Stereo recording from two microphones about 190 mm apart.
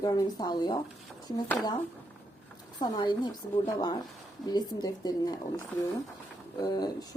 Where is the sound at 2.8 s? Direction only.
25° left (ahead or behind).